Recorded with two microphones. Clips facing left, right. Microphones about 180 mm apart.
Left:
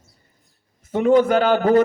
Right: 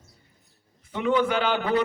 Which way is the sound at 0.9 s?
45° left (ahead or behind).